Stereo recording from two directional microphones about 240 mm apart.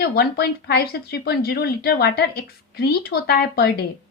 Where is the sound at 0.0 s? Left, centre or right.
Left.